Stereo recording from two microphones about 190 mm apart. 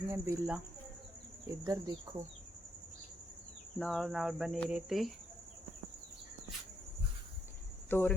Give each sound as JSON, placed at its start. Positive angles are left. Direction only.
{"t": 0.1, "sound": "speech", "side_deg": -15}
{"t": 1.6, "sound": "speech", "side_deg": -20}
{"t": 3.8, "sound": "speech", "side_deg": 0}
{"t": 7.9, "sound": "speech", "side_deg": 10}